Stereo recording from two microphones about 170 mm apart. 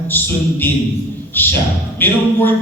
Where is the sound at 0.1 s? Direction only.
10° left (ahead or behind).